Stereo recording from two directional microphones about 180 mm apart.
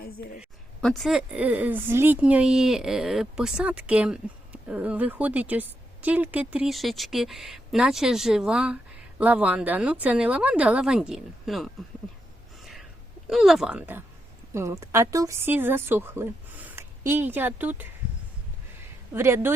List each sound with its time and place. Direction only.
0.0 s a woman's voice: 55° left (ahead or behind)
0.8 s speech: 5° left (ahead or behind)
13.2 s speech: centre (ahead or behind)
19.1 s speech: 15° right (ahead or behind)